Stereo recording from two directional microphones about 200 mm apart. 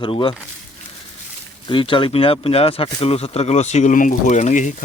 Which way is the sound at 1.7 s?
25° left (ahead or behind).